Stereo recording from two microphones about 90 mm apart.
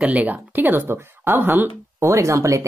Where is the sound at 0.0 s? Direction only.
20° right (ahead or behind).